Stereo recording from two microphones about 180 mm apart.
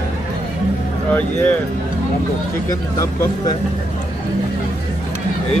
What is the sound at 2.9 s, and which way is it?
Speech, 20° left (ahead or behind).